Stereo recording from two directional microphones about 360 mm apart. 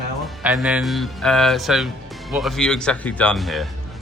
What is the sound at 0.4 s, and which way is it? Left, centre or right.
Speech, centre.